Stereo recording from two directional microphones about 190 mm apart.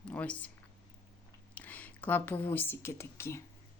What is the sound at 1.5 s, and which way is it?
Speech, 10° left (ahead or behind).